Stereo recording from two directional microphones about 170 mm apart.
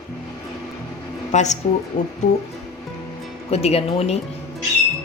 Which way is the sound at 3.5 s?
35° left (ahead or behind).